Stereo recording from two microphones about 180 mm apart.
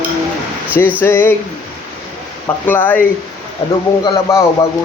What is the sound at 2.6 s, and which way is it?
Speech, 10° left (ahead or behind).